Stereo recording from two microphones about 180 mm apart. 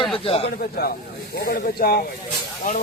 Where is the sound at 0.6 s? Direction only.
55° left (ahead or behind).